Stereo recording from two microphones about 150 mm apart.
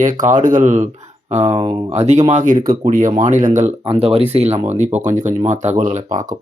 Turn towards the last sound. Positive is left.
turn(degrees=-60)  # may be behind; listen again after turning